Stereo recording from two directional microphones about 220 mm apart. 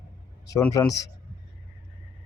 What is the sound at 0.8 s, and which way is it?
Speech, 15° left (ahead or behind).